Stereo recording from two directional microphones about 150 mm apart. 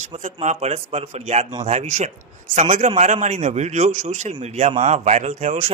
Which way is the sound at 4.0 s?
60° right (ahead or behind).